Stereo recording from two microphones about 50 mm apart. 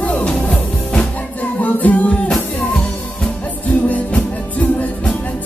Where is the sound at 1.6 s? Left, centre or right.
Left.